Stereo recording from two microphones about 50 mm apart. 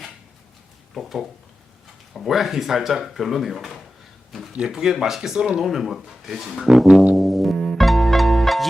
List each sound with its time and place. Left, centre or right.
0.9 s speech: centre
4.5 s speech: centre
7.2 s music: centre
7.5 s music: centre
7.8 s pizzicato: centre